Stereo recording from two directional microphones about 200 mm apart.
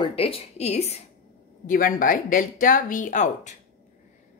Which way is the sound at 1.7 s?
45° left (ahead or behind).